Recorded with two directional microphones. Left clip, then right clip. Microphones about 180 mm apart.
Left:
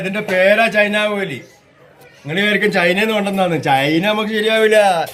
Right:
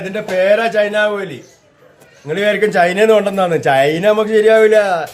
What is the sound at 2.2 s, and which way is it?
A man's voice, 35° right (ahead or behind).